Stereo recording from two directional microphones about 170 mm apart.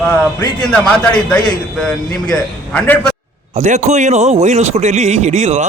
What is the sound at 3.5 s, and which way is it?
A man's voice, 45° right (ahead or behind).